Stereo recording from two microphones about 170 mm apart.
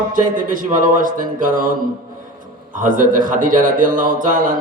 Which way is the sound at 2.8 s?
50° right (ahead or behind).